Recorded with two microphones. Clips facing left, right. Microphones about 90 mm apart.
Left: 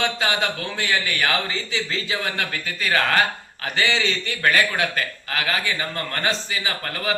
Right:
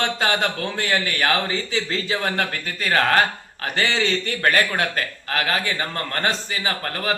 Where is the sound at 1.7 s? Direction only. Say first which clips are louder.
Right 1 dB; 40° right (ahead or behind).